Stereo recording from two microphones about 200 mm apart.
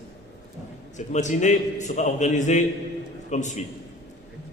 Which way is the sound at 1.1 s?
35° left (ahead or behind).